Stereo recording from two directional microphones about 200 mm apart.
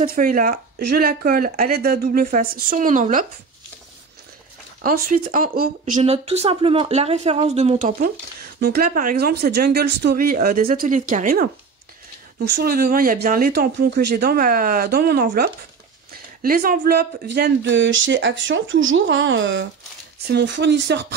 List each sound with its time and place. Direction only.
0.1 s speech: 45° right (ahead or behind)
4.8 s speech: 45° right (ahead or behind)
8.5 s speech: 50° right (ahead or behind)
12.4 s speech: 50° right (ahead or behind)